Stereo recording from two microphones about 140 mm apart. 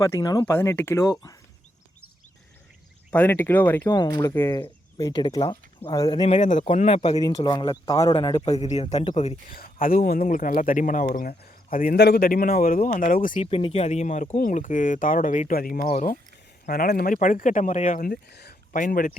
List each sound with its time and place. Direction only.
0.0 s speech: 25° left (ahead or behind)
0.4 s speech: 15° left (ahead or behind)
3.1 s speech: 10° left (ahead or behind)
3.9 s speech: 30° left (ahead or behind)
6.4 s speech: 60° left (ahead or behind)
6.7 s speech: 45° left (ahead or behind)
7.2 s speech: 30° left (ahead or behind)
7.9 s speech: 20° left (ahead or behind)
8.4 s speech: 45° left (ahead or behind)
9.5 s speech: 90° left
13.4 s speech: 40° left (ahead or behind)
13.8 s speech: 55° left (ahead or behind); by 15.8 s 90° left
15.8 s speech: 55° left (ahead or behind)
16.6 s speech: 90° left